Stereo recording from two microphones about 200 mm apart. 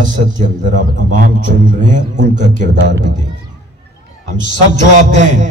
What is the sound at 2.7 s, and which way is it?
Speech, 65° right (ahead or behind).